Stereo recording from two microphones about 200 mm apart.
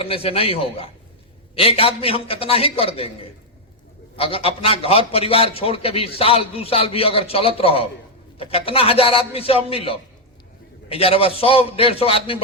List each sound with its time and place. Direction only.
0.0 s a man's voice: 30° left (ahead or behind)
4.2 s a man's voice: 30° left (ahead or behind)